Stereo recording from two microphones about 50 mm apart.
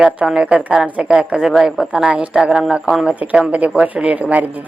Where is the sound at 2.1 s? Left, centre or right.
Right; by 3.1 s centre.